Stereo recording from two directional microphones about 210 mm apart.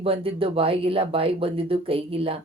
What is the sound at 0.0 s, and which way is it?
Speech, 25° right (ahead or behind).